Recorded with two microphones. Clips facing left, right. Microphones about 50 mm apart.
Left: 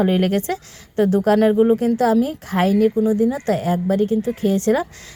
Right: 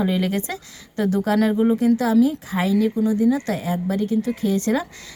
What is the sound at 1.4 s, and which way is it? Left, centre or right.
A woman's voice, left.